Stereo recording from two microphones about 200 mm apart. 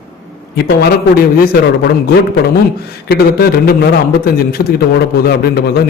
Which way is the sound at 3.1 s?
50° left (ahead or behind).